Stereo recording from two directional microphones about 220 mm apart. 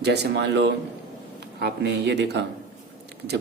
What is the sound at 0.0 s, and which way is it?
Speech, 50° right (ahead or behind).